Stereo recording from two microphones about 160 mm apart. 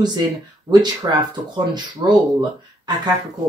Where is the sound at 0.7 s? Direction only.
25° right (ahead or behind).